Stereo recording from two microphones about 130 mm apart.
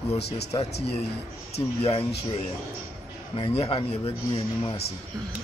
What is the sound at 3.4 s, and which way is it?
Speech, 45° left (ahead or behind).